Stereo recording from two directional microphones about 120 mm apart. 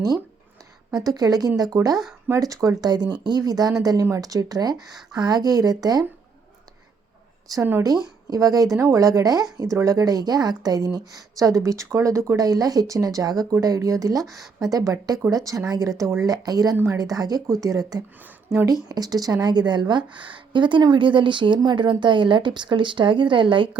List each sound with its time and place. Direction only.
0.9 s speech: 35° right (ahead or behind)
7.6 s speech: 20° right (ahead or behind)
8.3 s speech: 30° right (ahead or behind)
14.3 s a woman's voice: centre (ahead or behind)
14.6 s speech: 30° right (ahead or behind)